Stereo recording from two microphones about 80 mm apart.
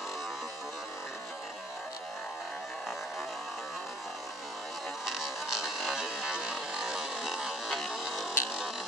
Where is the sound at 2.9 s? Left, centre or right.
Centre.